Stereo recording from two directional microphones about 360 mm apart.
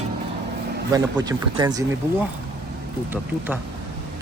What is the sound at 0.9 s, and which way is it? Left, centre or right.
Speech, centre.